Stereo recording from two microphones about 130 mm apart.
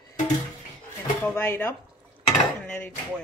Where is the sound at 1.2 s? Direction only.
15° left (ahead or behind).